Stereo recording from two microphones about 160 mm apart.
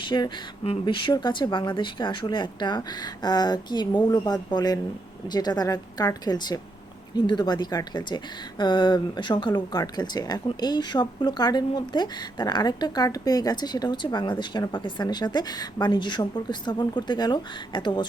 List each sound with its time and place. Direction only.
0.0 s a woman's voice: 30° left (ahead or behind)